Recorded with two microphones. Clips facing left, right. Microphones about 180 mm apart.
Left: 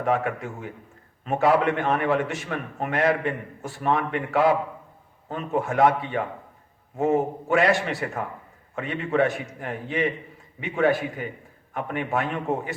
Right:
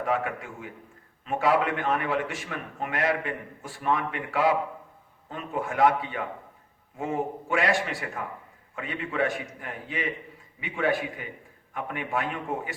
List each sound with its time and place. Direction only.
0.0 s a man's voice: 45° left (ahead or behind)